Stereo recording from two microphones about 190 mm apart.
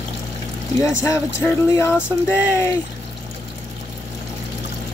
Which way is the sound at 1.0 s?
15° left (ahead or behind).